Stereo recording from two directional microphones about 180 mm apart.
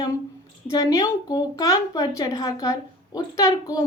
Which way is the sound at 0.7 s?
20° left (ahead or behind).